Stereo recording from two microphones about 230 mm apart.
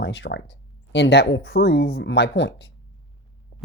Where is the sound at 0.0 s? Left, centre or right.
Left.